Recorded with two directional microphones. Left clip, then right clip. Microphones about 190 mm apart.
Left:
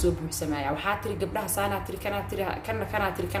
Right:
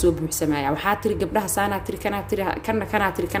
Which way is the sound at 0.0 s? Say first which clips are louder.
Right 7 dB; 45° right (ahead or behind).